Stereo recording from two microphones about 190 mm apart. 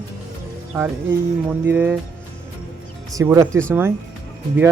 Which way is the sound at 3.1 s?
20° right (ahead or behind).